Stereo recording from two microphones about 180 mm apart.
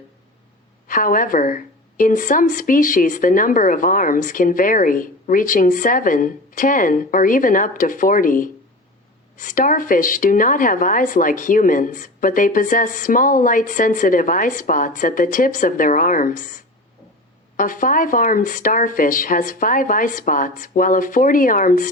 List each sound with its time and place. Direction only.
0.9 s a woman's voice: 50° left (ahead or behind)